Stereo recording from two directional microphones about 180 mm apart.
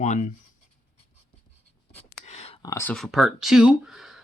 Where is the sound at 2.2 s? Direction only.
40° left (ahead or behind).